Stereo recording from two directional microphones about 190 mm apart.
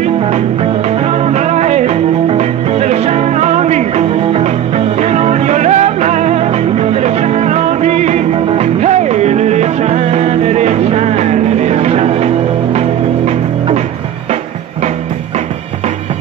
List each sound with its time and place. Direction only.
1.2 s music: 35° right (ahead or behind)